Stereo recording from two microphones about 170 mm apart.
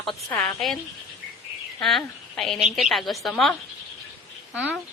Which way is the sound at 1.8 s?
Centre (ahead or behind).